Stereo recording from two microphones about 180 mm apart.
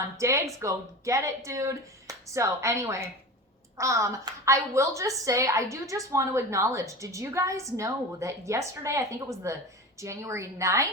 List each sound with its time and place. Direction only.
0.0 s a woman's voice: 15° right (ahead or behind)